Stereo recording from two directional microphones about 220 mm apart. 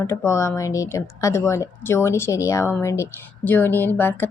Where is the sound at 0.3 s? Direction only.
15° left (ahead or behind).